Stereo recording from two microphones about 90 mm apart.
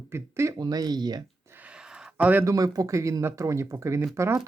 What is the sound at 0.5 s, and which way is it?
Speech, 45° right (ahead or behind).